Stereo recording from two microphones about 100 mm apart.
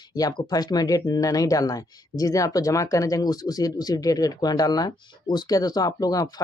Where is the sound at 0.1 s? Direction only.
40° left (ahead or behind).